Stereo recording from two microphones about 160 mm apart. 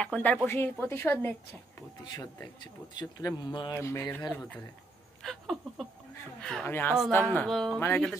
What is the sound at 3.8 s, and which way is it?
Speech, 15° left (ahead or behind).